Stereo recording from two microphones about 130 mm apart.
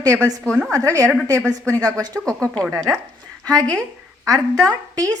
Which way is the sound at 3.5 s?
30° right (ahead or behind).